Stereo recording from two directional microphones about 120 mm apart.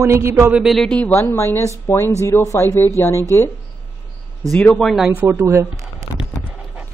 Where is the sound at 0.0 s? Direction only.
25° right (ahead or behind).